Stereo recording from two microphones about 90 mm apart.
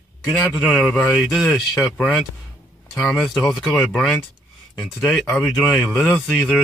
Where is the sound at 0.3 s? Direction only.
5° left (ahead or behind).